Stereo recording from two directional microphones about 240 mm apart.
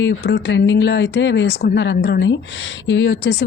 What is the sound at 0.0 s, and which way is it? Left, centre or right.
Speech, left.